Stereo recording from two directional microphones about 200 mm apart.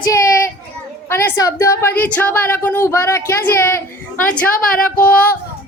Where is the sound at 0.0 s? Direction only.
15° left (ahead or behind).